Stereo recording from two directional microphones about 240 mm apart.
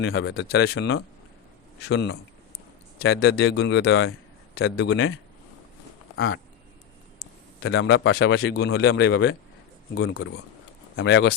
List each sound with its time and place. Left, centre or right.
0.0 s speech: left
6.1 s speech: left
7.2 s a man's voice: left